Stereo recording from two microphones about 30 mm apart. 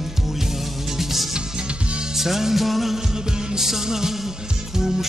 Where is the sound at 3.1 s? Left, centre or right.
Right.